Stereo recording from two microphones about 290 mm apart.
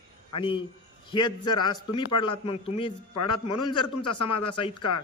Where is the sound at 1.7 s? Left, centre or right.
Left.